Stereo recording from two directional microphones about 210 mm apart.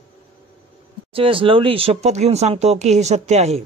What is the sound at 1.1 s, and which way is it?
Speech, 25° right (ahead or behind).